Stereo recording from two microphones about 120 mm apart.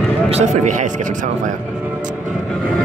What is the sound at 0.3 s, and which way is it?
Speech, 65° right (ahead or behind).